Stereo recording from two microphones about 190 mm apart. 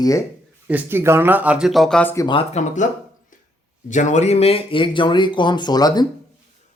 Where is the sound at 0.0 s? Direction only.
15° left (ahead or behind).